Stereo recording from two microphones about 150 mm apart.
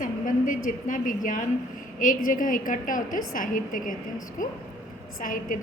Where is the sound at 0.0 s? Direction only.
60° left (ahead or behind).